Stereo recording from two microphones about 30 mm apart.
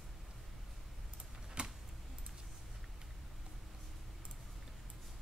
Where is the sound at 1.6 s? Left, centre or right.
Right.